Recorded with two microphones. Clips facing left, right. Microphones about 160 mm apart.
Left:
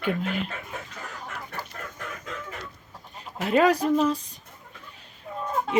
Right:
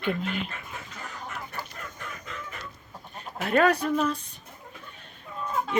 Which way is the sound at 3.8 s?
35° left (ahead or behind).